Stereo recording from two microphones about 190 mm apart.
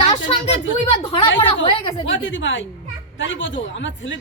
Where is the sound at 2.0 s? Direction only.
80° left.